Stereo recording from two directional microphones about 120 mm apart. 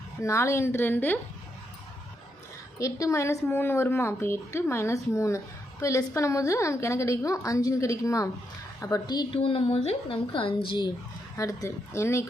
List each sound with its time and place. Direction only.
0.2 s speech: 25° left (ahead or behind)
2.7 s a woman's voice: 25° left (ahead or behind)
9.4 s speech: 55° left (ahead or behind)
11.3 s speech: 25° left (ahead or behind)